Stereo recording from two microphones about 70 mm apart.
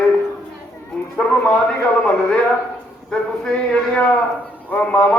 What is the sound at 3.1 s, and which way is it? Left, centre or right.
A man's voice, centre.